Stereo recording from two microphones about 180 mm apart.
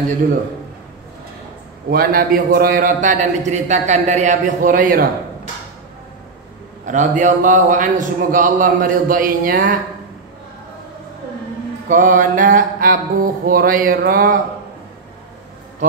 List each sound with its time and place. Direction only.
1.9 s a man's voice: 55° right (ahead or behind)
6.9 s a man's voice: 45° right (ahead or behind)
11.9 s a man's voice: 45° right (ahead or behind)